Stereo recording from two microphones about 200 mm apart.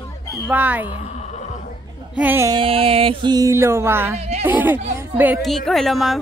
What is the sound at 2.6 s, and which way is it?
Music, 30° right (ahead or behind).